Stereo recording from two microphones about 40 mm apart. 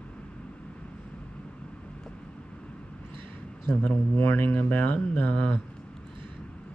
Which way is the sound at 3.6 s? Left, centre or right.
Left.